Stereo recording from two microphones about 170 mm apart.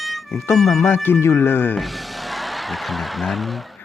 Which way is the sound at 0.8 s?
10° left (ahead or behind).